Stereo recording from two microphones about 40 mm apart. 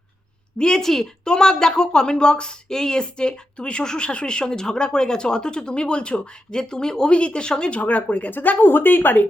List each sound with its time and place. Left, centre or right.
0.6 s a woman's voice: centre
7.8 s speech: left
8.3 s speech: left